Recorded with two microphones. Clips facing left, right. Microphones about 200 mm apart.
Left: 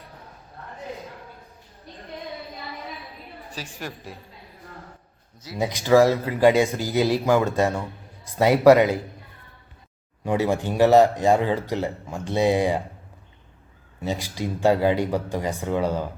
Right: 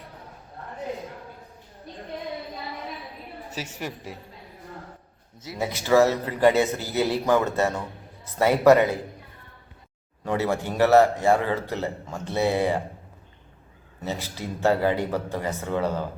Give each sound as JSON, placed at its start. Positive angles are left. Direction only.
{"t": 3.5, "sound": "a woman's voice", "side_deg": -20}
{"t": 3.8, "sound": "a woman's voice", "side_deg": -5}
{"t": 5.5, "sound": "speech", "side_deg": 15}
{"t": 10.2, "sound": "speech", "side_deg": 15}
{"t": 14.0, "sound": "speech", "side_deg": 15}